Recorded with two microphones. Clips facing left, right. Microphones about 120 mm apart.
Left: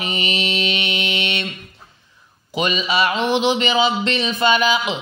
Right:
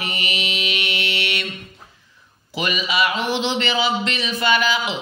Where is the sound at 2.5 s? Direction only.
25° left (ahead or behind).